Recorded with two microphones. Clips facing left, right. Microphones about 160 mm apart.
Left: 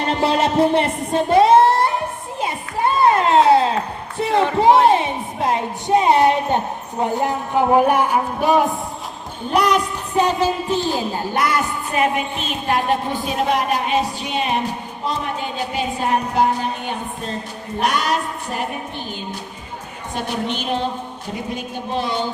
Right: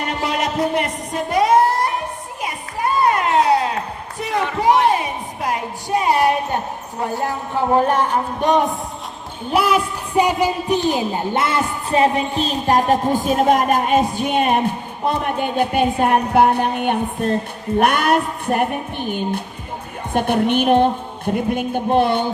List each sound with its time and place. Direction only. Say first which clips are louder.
0.1 s music: left 6 dB; 30° left (ahead or behind)
2.4 s children playing: left 3 dB; 25° left (ahead or behind)
4.2 s music: left 4 dB; 30° left (ahead or behind)
7.0 s a man's voice: left 2 dB; 20° left (ahead or behind); by 22.3 s 55° right (ahead or behind)